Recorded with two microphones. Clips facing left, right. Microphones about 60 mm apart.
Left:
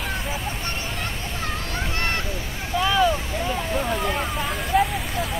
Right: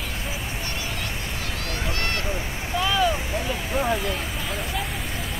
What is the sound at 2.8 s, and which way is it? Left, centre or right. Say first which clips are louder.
Vehicle: left 3 dB; centre.